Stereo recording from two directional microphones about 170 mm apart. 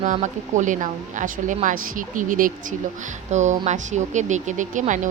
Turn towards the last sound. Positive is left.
turn(degrees=-45)  # may be behind; listen again after turning